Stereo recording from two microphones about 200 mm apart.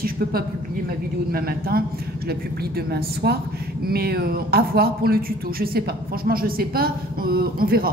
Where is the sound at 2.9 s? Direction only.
55° right (ahead or behind).